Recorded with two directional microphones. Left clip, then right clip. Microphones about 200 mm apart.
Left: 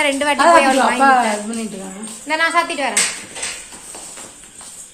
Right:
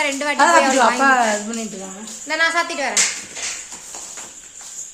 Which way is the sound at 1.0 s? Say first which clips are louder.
Left 2 dB; 35° right (ahead or behind).